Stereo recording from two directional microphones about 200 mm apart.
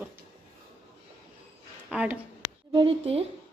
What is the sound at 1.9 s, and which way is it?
Speech, 5° right (ahead or behind).